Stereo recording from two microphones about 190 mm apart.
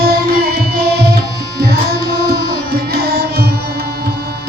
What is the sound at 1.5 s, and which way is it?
Carnatic music, 55° right (ahead or behind).